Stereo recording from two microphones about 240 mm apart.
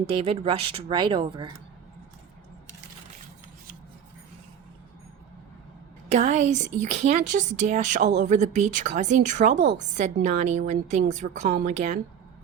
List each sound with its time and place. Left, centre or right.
0.2 s speech: right
6.1 s speech: right